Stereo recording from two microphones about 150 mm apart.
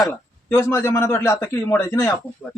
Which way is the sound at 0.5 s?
15° left (ahead or behind).